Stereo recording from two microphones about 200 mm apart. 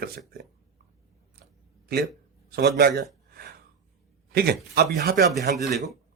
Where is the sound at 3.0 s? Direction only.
50° right (ahead or behind).